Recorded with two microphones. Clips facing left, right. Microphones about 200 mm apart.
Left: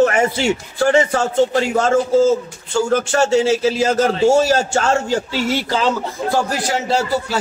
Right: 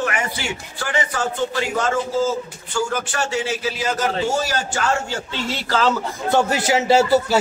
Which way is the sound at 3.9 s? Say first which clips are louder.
Left 6 dB; 45° left (ahead or behind).